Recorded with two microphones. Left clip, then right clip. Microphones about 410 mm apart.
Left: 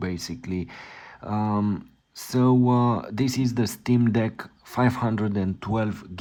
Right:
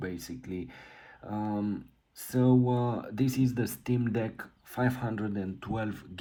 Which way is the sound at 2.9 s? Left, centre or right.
Centre.